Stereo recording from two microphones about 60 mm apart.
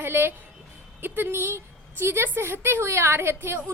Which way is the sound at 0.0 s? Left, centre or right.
Right.